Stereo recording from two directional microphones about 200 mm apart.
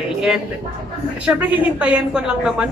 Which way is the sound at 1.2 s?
5° right (ahead or behind).